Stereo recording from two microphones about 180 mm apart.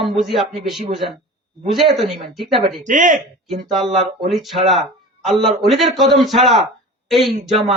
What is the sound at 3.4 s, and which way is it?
Speech, centre (ahead or behind).